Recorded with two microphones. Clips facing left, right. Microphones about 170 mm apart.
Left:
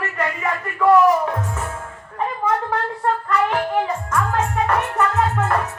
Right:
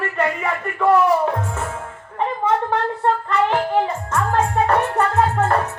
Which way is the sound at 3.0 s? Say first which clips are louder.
Even; 25° right (ahead or behind).